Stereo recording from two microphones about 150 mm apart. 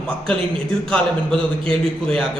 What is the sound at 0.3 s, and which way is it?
A man's voice, 5° left (ahead or behind).